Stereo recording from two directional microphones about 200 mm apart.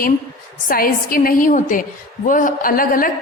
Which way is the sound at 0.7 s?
45° left (ahead or behind).